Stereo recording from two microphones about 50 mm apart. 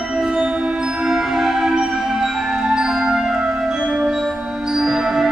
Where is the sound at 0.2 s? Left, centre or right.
Centre.